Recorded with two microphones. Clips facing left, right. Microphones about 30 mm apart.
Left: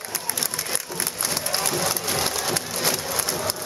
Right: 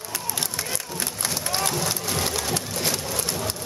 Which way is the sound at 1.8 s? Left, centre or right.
Centre.